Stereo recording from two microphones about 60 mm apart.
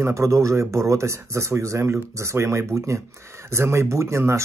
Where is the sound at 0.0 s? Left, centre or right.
Right.